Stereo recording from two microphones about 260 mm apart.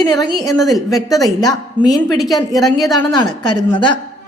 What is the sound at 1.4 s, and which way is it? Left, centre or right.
Speech, centre.